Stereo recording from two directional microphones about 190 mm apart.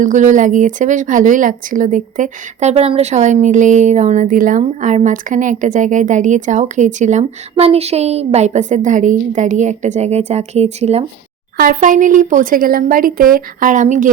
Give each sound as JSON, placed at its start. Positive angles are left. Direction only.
{"t": 0.0, "sound": "speech", "side_deg": -40}
{"t": 11.5, "sound": "speech", "side_deg": -45}